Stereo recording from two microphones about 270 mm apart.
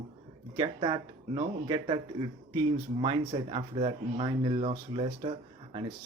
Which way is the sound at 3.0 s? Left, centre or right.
Centre.